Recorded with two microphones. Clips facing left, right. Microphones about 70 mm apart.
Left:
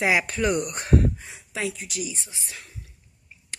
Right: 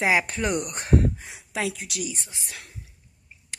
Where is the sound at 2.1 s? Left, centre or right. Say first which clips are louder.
Even; right.